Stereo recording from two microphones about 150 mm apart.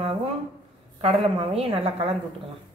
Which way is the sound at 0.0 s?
40° right (ahead or behind).